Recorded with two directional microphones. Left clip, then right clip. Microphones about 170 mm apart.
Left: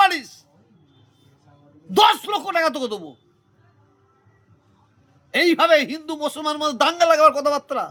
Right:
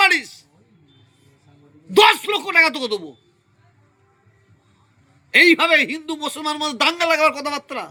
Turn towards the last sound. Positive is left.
turn(degrees=25)  # may be behind; listen again after turning